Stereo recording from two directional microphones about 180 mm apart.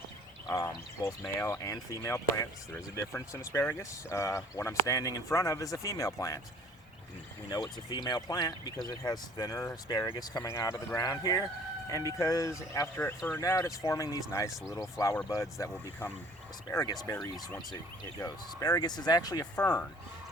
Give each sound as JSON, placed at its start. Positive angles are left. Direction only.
{"t": 0.4, "sound": "speech", "side_deg": 20}
{"t": 7.5, "sound": "speech", "side_deg": 25}
{"t": 18.2, "sound": "speech", "side_deg": 20}